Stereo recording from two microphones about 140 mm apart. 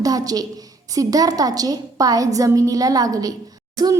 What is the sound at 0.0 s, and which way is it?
A woman's voice, 25° right (ahead or behind).